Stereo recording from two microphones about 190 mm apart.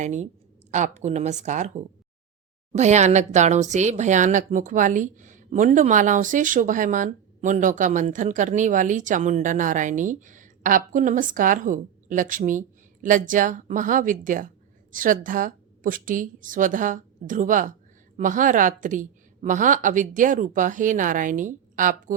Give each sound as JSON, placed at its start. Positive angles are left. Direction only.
{"t": 0.0, "sound": "speech", "side_deg": -40}
{"t": 2.7, "sound": "a woman's voice", "side_deg": -35}